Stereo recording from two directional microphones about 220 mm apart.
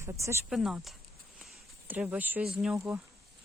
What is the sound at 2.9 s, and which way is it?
Speech, 5° right (ahead or behind).